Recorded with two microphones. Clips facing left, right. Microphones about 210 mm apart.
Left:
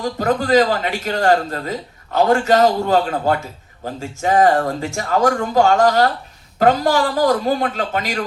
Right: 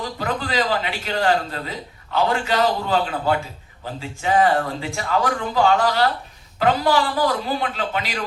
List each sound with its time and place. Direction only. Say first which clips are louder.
0.0 s a man's voice: left 7 dB; 45° left (ahead or behind)